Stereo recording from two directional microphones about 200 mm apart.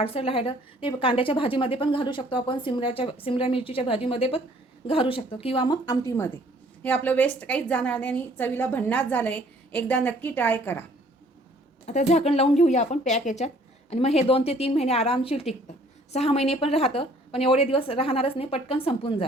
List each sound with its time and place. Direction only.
0.0 s a woman's voice: 30° left (ahead or behind); by 10.8 s 10° left (ahead or behind)
11.9 s a woman's voice: 35° left (ahead or behind)